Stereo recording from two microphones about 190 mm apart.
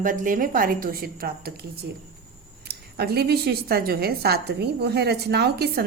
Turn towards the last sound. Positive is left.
turn(degrees=-60)  # may be behind; listen again after turning